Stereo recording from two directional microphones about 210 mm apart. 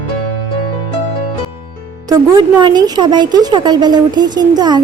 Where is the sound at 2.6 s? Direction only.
20° right (ahead or behind).